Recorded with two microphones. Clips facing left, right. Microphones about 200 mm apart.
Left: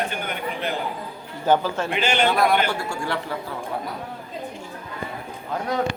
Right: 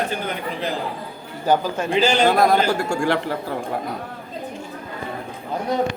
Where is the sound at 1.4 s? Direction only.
15° right (ahead or behind).